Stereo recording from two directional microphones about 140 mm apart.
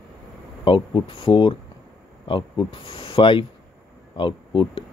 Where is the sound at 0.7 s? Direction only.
35° left (ahead or behind).